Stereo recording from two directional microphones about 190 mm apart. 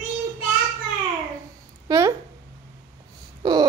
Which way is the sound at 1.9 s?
20° right (ahead or behind).